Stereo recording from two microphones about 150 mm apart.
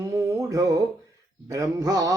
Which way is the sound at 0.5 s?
25° right (ahead or behind).